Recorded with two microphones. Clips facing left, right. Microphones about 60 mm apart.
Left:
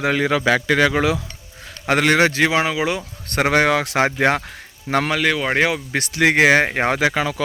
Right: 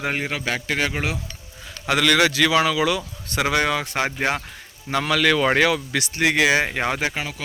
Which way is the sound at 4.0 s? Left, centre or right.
Left.